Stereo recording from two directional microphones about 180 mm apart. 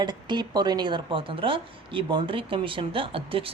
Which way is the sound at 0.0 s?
25° right (ahead or behind).